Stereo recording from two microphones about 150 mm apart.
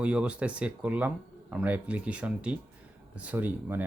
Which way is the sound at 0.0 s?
5° right (ahead or behind).